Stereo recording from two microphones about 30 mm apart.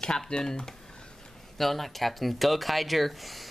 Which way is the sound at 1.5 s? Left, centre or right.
Centre.